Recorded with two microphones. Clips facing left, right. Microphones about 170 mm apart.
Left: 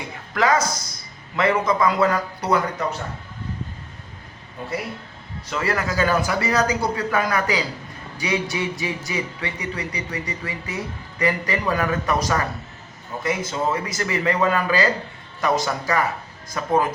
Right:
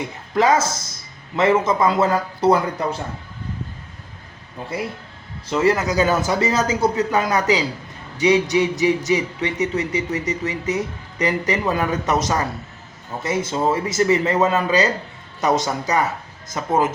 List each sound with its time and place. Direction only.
0.3 s a man's voice: 25° right (ahead or behind)
5.5 s a man's voice: 20° right (ahead or behind)